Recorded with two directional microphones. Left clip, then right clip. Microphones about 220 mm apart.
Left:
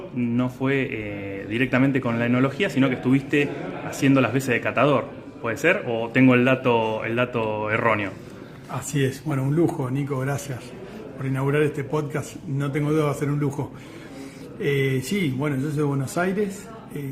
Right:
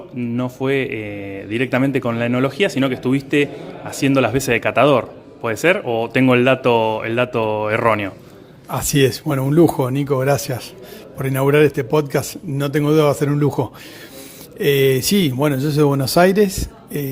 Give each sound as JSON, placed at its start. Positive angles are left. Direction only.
{"t": 0.2, "sound": "speech", "side_deg": -20}
{"t": 8.7, "sound": "a man's voice", "side_deg": -45}
{"t": 14.6, "sound": "speech", "side_deg": -50}